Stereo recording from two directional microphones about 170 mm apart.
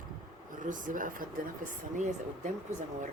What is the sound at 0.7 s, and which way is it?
Speech, 50° right (ahead or behind).